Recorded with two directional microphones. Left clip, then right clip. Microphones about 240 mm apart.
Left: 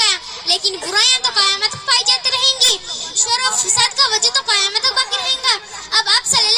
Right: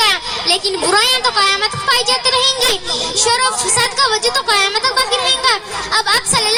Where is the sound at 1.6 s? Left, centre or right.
Left.